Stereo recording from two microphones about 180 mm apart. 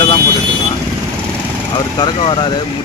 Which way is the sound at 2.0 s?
25° left (ahead or behind).